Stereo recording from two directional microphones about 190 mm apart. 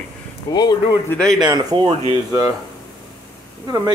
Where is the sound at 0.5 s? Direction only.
20° left (ahead or behind).